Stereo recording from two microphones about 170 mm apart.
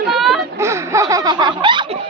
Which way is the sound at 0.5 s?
15° right (ahead or behind).